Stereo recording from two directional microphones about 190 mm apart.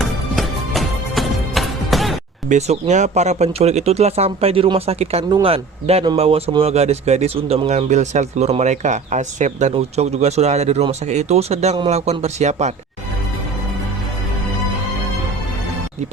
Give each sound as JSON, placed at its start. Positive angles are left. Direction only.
{"t": 0.0, "sound": "music", "side_deg": 0}
{"t": 2.5, "sound": "speech", "side_deg": -35}